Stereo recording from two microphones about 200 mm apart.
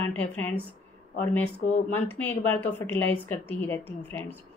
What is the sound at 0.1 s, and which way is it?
Speech, 10° left (ahead or behind).